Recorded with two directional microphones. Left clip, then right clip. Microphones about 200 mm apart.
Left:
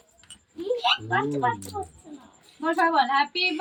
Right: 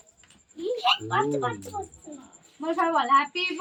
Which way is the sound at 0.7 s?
30° right (ahead or behind).